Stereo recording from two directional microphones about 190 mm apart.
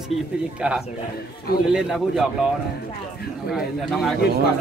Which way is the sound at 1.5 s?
55° left (ahead or behind).